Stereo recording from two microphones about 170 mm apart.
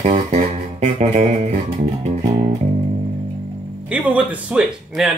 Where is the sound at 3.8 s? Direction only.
10° right (ahead or behind).